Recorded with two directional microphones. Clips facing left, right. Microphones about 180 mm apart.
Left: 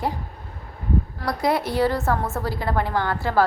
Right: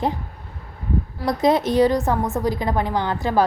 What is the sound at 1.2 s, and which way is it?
A woman's voice, 20° right (ahead or behind).